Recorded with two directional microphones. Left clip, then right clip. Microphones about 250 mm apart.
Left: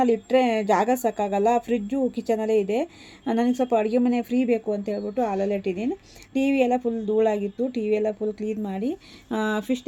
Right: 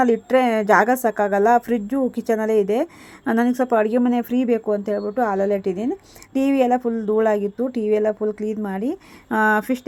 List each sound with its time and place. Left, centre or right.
0.0 s speech: centre